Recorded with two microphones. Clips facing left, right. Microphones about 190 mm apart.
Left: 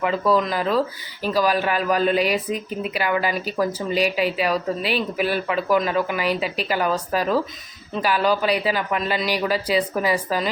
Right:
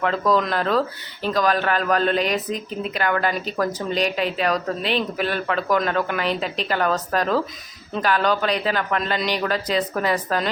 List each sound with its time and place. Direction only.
0.0 s speech: 5° left (ahead or behind)